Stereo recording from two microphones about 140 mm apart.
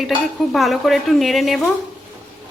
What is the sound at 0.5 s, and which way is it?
Speech, centre (ahead or behind).